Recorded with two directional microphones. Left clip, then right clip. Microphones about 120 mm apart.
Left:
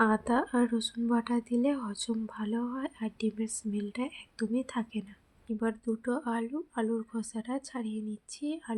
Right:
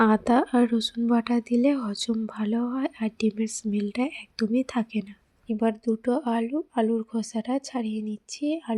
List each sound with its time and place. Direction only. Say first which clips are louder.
0.0 s speech: right 6 dB; 55° right (ahead or behind)